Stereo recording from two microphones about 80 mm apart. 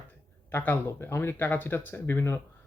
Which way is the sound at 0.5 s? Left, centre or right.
Left.